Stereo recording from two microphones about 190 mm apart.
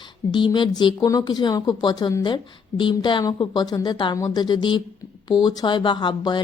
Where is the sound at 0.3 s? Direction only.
25° left (ahead or behind).